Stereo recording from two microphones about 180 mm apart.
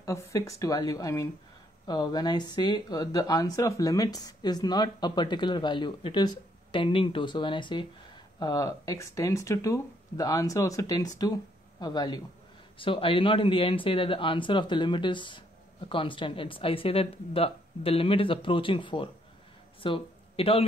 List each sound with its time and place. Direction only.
0.0 s speech: 15° left (ahead or behind); by 20.6 s 30° left (ahead or behind)